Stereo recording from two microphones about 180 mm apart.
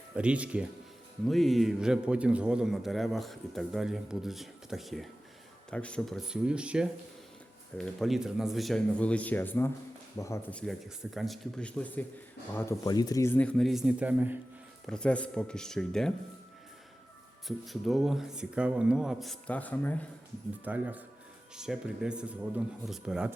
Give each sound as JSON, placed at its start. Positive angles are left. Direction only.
{"t": 0.1, "sound": "a man's voice", "side_deg": -5}
{"t": 10.7, "sound": "a man's voice", "side_deg": 0}
{"t": 12.5, "sound": "speech", "side_deg": 15}
{"t": 14.8, "sound": "a man's voice", "side_deg": 5}
{"t": 17.7, "sound": "a man's voice", "side_deg": 0}
{"t": 20.7, "sound": "a man's voice", "side_deg": -10}